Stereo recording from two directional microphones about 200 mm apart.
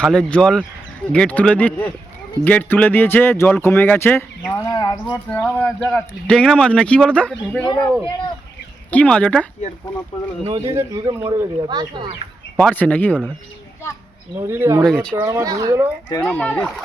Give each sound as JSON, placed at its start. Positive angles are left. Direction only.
{"t": 0.0, "sound": "speech", "side_deg": 5}
{"t": 7.6, "sound": "speech", "side_deg": 20}
{"t": 8.9, "sound": "speech", "side_deg": 5}
{"t": 10.4, "sound": "speech", "side_deg": -20}
{"t": 12.5, "sound": "speech", "side_deg": 5}
{"t": 14.3, "sound": "speech", "side_deg": -10}
{"t": 14.8, "sound": "speech", "side_deg": 5}
{"t": 15.1, "sound": "speech", "side_deg": -10}
{"t": 16.2, "sound": "speech", "side_deg": 5}